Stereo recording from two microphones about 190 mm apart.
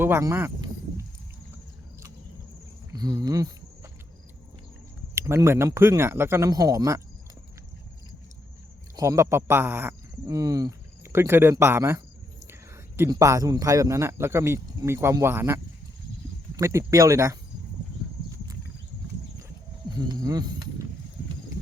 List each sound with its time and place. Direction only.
0.0 s a sound: 15° right (ahead or behind)
2.9 s speech: 20° right (ahead or behind)
5.1 s a man's voice: 15° right (ahead or behind)
9.0 s a man's voice: 15° right (ahead or behind)
20.0 s speech: 20° right (ahead or behind)